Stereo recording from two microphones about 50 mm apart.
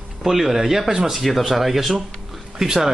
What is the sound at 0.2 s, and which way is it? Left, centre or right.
Speech, centre.